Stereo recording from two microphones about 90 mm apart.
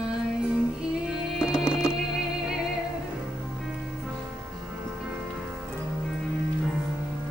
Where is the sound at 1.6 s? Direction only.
10° right (ahead or behind).